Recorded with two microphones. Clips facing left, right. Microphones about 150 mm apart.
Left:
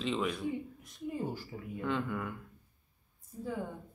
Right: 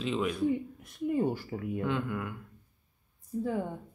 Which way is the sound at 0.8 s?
60° right (ahead or behind).